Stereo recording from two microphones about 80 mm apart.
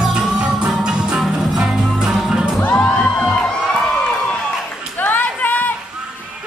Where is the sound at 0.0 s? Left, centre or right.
Centre.